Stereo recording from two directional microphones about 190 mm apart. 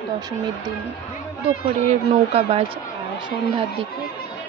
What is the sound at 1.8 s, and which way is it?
Speech, 35° right (ahead or behind).